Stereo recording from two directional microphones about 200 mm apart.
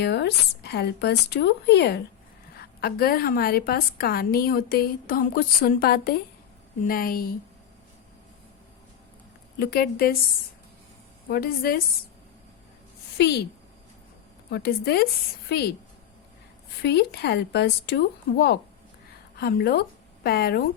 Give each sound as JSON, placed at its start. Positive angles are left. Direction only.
{"t": 0.0, "sound": "a woman's voice", "side_deg": 55}
{"t": 9.6, "sound": "a woman's voice", "side_deg": 50}
{"t": 11.3, "sound": "a woman's voice", "side_deg": 50}
{"t": 13.1, "sound": "a woman's voice", "side_deg": 55}
{"t": 14.5, "sound": "a woman's voice", "side_deg": 50}
{"t": 16.8, "sound": "a woman's voice", "side_deg": 55}